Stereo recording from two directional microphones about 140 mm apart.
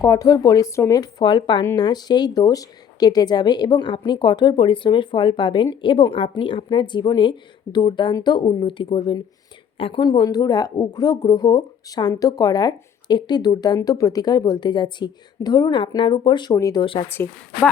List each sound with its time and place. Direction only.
0.0 s speech: 25° left (ahead or behind)
16.8 s speech: 40° left (ahead or behind)
17.1 s a woman's voice: 15° left (ahead or behind)